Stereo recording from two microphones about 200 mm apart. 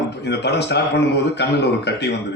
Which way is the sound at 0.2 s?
55° left (ahead or behind).